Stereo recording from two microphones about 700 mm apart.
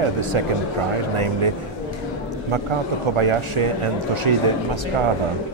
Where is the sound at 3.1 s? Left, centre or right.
Right.